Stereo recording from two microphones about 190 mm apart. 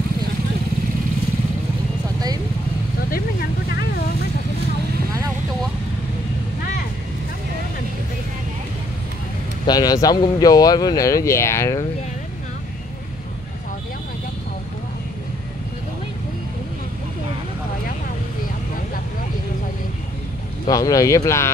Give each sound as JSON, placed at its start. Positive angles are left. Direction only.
{"t": 9.7, "sound": "speech", "side_deg": 20}
{"t": 20.6, "sound": "speech", "side_deg": 20}